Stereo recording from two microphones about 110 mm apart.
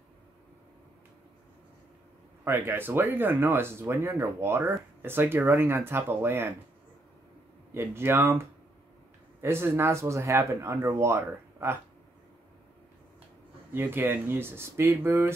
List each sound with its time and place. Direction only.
2.4 s speech: 20° right (ahead or behind)
7.7 s speech: 20° right (ahead or behind)
13.7 s speech: 20° right (ahead or behind)